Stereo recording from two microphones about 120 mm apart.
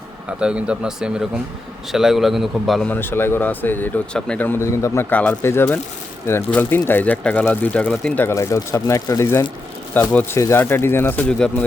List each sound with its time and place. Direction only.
0.3 s a man's voice: 10° right (ahead or behind)
2.8 s speech: 15° left (ahead or behind)
5.1 s speech: 10° left (ahead or behind)
5.4 s speech: 20° left (ahead or behind)